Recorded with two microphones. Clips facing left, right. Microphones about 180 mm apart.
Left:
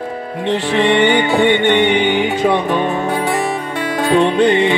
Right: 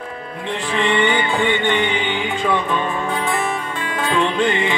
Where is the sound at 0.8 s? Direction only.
75° left (ahead or behind).